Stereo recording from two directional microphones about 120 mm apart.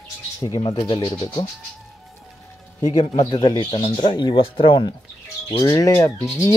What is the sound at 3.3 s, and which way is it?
Speech, 40° left (ahead or behind).